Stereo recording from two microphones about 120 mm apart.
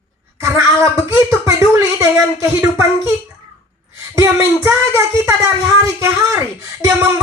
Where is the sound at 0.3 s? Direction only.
25° right (ahead or behind).